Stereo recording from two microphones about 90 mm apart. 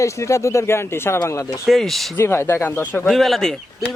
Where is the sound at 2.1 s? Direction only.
25° left (ahead or behind).